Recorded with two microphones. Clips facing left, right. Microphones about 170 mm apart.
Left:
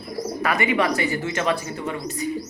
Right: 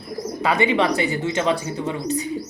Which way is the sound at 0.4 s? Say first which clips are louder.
Right 3 dB; 25° right (ahead or behind).